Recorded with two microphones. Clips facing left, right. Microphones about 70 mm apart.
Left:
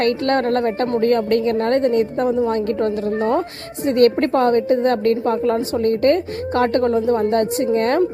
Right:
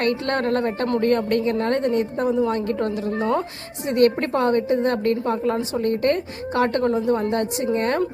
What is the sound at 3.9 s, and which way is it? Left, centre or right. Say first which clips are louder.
A woman's voice: left 4 dB; left.